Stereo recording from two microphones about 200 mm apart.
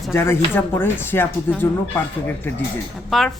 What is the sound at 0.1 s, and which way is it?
A woman's voice, 15° left (ahead or behind).